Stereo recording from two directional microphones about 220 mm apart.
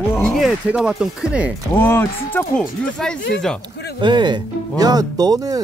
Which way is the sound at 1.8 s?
10° left (ahead or behind).